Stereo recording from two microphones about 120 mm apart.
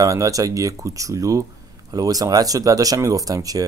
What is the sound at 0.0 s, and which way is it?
Speech, 30° right (ahead or behind).